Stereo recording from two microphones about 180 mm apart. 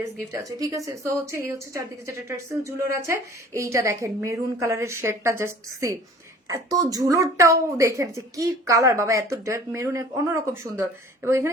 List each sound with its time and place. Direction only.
0.3 s speech: 20° right (ahead or behind)